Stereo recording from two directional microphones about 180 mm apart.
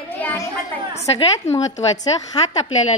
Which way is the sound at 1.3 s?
15° left (ahead or behind).